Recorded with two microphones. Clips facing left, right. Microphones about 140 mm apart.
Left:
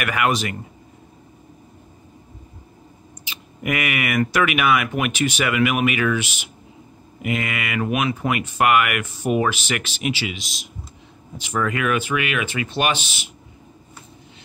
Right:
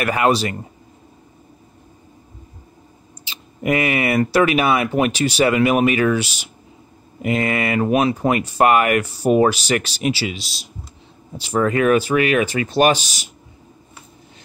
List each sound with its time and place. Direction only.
0.0 s speech: 30° right (ahead or behind)
3.3 s speech: 30° right (ahead or behind)